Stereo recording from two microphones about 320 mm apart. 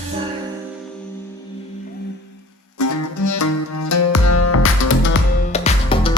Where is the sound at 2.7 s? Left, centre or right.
Left.